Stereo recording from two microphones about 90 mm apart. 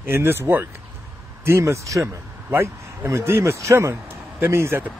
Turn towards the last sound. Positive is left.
turn(degrees=-30)  # may be behind; listen again after turning